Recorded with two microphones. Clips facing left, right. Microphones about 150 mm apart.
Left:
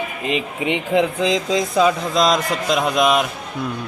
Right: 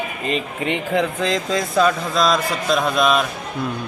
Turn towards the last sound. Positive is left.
turn(degrees=15)  # may be behind; listen again after turning